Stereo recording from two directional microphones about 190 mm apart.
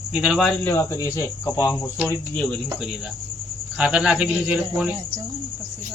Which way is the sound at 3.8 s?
5° right (ahead or behind).